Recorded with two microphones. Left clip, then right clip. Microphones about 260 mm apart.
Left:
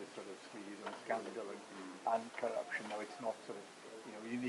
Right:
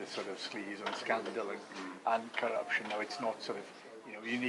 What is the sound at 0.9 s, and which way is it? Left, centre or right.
Speech, centre.